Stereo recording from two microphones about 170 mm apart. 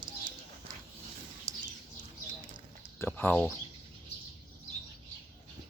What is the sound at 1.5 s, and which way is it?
Bird, 20° right (ahead or behind).